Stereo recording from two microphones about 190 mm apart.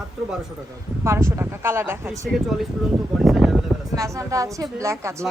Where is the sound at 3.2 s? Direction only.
Centre (ahead or behind).